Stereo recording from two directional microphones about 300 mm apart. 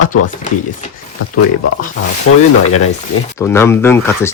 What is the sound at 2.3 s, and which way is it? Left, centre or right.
Speech, left.